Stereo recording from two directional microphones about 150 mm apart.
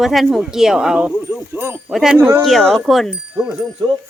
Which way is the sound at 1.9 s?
5° right (ahead or behind).